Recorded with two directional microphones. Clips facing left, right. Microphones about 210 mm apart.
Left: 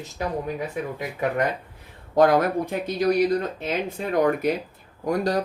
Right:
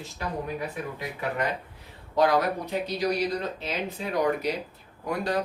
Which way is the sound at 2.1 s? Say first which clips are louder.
Left 5 dB; 50° left (ahead or behind).